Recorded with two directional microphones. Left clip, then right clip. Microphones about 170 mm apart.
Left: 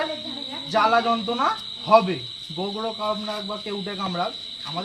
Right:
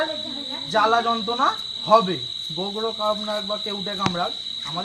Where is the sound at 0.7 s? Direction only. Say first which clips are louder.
Even; 20° right (ahead or behind).